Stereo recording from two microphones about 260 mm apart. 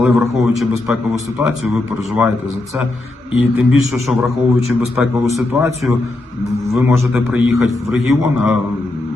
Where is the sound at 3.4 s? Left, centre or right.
Centre.